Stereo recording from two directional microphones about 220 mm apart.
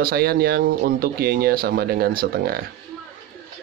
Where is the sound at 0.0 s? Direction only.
45° right (ahead or behind).